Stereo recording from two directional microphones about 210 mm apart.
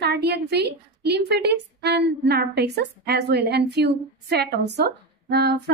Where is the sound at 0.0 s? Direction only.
50° right (ahead or behind).